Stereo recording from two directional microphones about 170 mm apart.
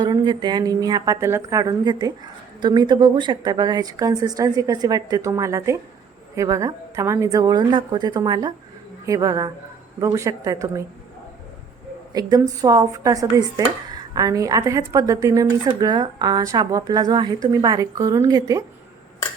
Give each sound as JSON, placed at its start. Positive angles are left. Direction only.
{"t": 0.0, "sound": "a woman's voice", "side_deg": -25}
{"t": 12.1, "sound": "a woman's voice", "side_deg": -20}